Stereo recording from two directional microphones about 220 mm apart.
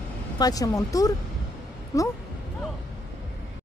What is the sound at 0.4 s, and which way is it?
Speech, 15° left (ahead or behind).